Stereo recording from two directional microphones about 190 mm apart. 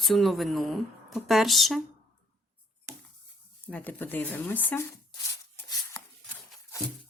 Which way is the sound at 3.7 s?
10° left (ahead or behind).